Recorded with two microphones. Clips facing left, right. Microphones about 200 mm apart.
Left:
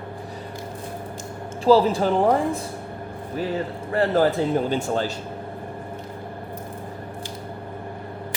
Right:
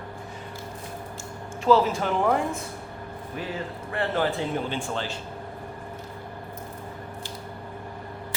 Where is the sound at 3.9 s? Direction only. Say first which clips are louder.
Left 7 dB; 40° left (ahead or behind).